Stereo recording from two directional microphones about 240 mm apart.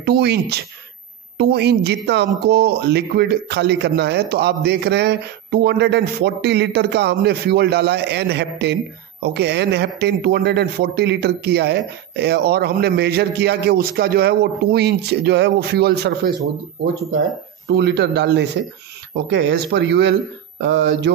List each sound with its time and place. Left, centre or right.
0.0 s speech: right
17.6 s speech: right